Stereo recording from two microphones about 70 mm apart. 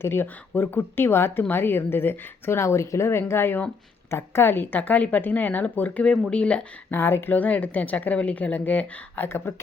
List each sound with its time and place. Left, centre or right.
0.0 s a woman's voice: left; by 6.7 s centre
6.9 s a woman's voice: left